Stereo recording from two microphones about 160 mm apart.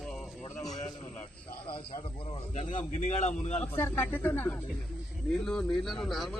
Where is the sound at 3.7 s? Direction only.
15° left (ahead or behind).